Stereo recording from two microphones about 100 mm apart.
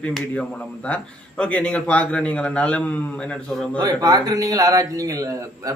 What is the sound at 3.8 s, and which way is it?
Speech, 35° right (ahead or behind).